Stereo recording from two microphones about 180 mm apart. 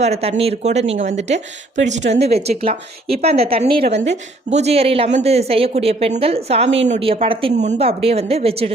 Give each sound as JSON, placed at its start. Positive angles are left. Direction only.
{"t": 0.0, "sound": "speech", "side_deg": -35}
{"t": 2.0, "sound": "a woman's voice", "side_deg": -75}
{"t": 2.5, "sound": "speech", "side_deg": -35}